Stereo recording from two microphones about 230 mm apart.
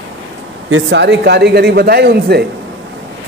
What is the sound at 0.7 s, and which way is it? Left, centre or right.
Speech, right.